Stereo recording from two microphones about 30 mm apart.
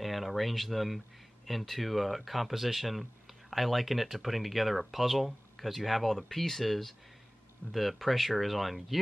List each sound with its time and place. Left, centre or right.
0.0 s speech: centre
7.6 s speech: right
8.0 s speech: centre